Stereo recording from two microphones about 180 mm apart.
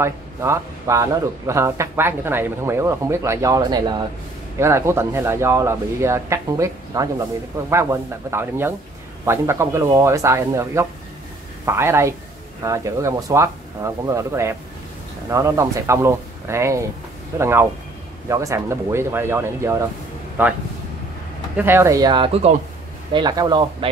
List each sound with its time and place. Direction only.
0.0 s speech: 15° right (ahead or behind)
21.5 s speech: 15° right (ahead or behind)